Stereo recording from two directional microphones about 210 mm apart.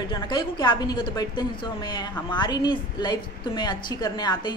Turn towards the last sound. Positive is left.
turn(degrees=20)  # may be behind; listen again after turning